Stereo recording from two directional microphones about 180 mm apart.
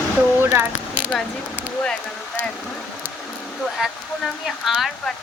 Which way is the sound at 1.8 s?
5° left (ahead or behind).